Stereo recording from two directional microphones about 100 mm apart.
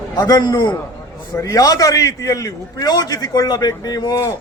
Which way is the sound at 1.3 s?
35° left (ahead or behind).